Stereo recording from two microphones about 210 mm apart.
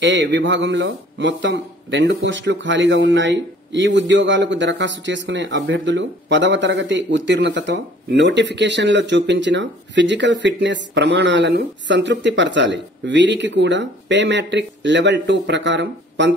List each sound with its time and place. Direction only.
0.0 s a man's voice: 60° right (ahead or behind)